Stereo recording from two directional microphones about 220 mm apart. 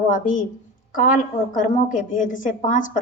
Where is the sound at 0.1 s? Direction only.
35° left (ahead or behind).